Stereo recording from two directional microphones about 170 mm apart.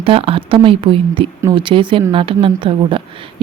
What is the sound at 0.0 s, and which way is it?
A woman's voice, 35° right (ahead or behind).